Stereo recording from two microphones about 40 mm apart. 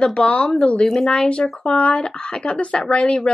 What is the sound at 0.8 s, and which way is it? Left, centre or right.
A woman's voice, centre.